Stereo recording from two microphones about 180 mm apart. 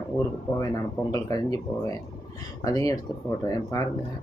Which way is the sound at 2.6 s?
20° left (ahead or behind).